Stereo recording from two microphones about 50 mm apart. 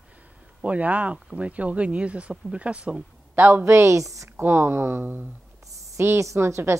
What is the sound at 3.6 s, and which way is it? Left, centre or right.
Speech, right.